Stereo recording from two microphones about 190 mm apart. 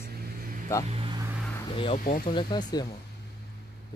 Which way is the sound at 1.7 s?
30° left (ahead or behind).